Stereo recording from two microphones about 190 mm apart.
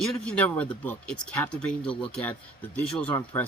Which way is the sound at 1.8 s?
30° left (ahead or behind).